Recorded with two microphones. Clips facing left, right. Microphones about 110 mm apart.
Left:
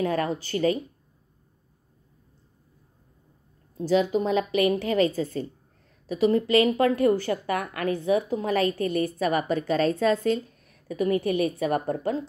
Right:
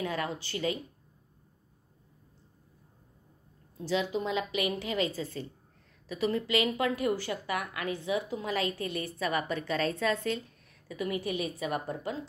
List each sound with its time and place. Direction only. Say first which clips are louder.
0.0 s a woman's voice: left 8 dB; 45° left (ahead or behind)
3.8 s a woman's voice: left 8 dB; 45° left (ahead or behind)